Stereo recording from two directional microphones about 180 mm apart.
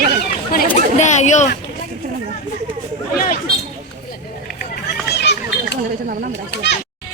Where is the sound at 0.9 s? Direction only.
40° left (ahead or behind).